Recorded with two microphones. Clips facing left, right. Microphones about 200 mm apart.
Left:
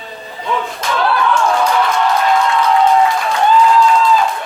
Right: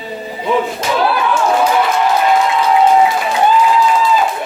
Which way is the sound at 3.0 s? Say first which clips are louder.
Right 1 dB; 15° right (ahead or behind).